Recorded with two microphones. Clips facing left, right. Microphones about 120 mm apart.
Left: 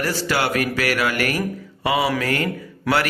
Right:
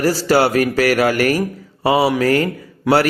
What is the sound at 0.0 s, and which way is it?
A man's voice, 35° right (ahead or behind).